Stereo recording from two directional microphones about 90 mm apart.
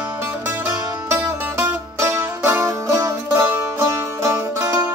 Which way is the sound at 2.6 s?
35° right (ahead or behind).